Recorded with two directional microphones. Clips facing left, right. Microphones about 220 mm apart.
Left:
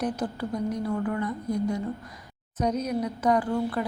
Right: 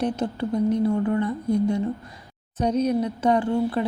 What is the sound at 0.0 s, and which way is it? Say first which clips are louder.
Speech: right 4 dB; 25° right (ahead or behind).